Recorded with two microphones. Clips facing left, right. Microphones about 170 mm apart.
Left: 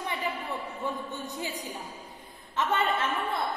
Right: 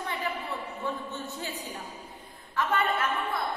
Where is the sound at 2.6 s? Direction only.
20° left (ahead or behind).